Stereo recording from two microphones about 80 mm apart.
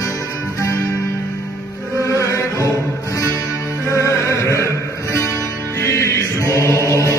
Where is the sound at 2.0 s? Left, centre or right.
Left.